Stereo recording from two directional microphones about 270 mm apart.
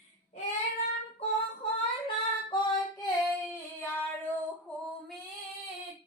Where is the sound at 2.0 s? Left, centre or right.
Centre.